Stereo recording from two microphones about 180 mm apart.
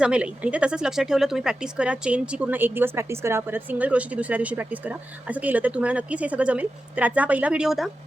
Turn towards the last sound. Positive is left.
turn(degrees=0)  # may be behind; listen again after turning